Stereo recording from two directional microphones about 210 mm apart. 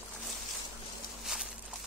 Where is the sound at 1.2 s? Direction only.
Centre (ahead or behind).